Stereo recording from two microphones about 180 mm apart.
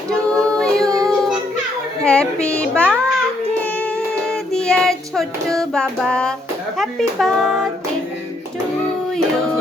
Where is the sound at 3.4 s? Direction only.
10° left (ahead or behind).